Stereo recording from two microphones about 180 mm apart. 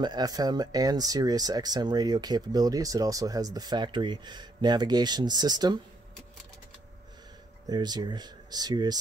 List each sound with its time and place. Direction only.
0.0 s speech: 20° right (ahead or behind)
7.6 s speech: 25° right (ahead or behind)